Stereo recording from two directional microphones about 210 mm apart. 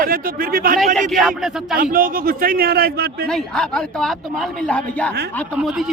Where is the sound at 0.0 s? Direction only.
45° right (ahead or behind).